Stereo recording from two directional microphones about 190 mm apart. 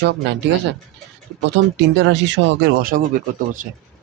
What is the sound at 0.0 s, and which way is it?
Speech, 60° right (ahead or behind).